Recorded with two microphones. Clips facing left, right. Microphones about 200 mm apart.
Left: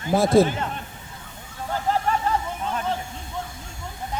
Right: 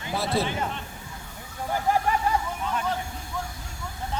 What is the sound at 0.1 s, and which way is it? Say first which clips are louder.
Speech: left 10 dB; 45° left (ahead or behind).